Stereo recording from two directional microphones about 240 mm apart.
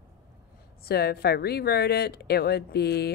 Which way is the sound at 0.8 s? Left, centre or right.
Left.